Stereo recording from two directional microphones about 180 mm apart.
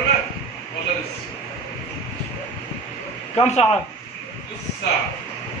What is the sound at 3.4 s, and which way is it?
Speech, 35° left (ahead or behind).